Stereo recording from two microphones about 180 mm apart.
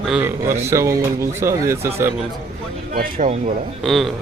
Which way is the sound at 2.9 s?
50° right (ahead or behind).